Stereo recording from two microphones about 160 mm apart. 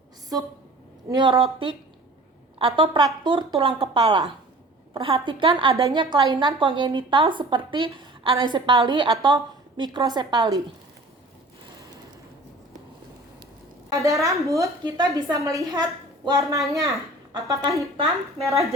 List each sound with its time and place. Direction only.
1.1 s a woman's voice: 30° right (ahead or behind)
13.9 s a woman's voice: 20° right (ahead or behind)